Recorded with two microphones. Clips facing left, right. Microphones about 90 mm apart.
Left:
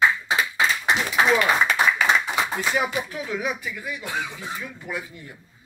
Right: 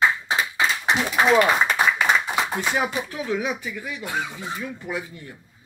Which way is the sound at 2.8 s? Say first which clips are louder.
Even; 25° right (ahead or behind).